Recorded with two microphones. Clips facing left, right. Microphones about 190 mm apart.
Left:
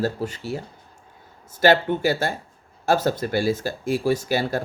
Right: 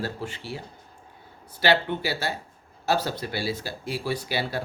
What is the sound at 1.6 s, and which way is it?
Speech, 45° left (ahead or behind).